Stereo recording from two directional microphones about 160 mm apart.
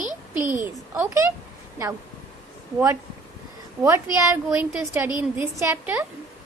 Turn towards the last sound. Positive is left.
turn(degrees=-15)  # may be behind; listen again after turning